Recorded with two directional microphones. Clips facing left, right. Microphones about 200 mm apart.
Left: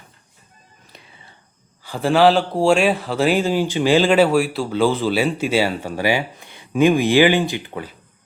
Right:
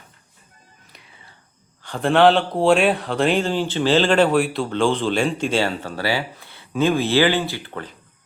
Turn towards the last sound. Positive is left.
turn(degrees=15)  # may be behind; listen again after turning